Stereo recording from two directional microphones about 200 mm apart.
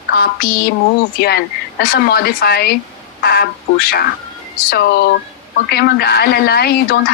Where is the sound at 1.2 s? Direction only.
55° left (ahead or behind).